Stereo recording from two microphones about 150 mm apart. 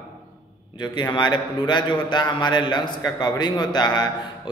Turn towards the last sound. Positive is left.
turn(degrees=30)  # may be behind; listen again after turning